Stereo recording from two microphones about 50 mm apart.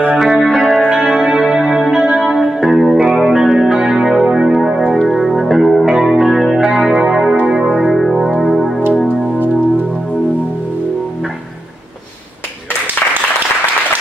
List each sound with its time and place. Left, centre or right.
0.2 s music: centre
0.7 s music: right
1.0 s music: centre
4.9 s music: centre
7.8 s music: centre